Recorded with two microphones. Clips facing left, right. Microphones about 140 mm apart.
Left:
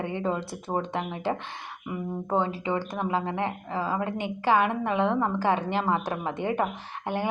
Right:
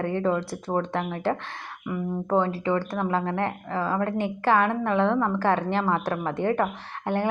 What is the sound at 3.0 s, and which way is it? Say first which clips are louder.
A woman's voice: right 2 dB; 5° left (ahead or behind).